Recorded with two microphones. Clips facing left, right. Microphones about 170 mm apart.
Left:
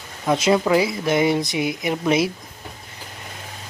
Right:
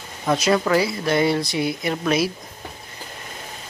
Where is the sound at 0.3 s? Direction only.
25° left (ahead or behind).